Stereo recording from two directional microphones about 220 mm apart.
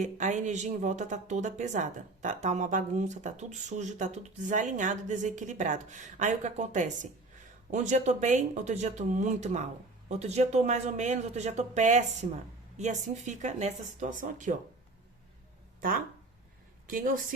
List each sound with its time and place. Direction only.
0.0 s a woman's voice: 35° right (ahead or behind)
15.8 s a woman's voice: 40° right (ahead or behind)